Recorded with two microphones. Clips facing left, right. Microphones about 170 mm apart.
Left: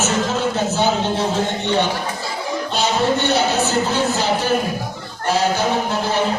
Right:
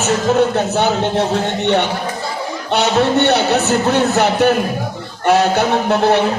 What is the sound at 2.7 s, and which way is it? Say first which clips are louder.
A man's voice: right 5 dB; 65° right (ahead or behind).